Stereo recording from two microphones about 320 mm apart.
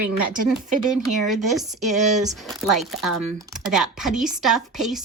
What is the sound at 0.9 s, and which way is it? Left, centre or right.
A woman's voice, centre.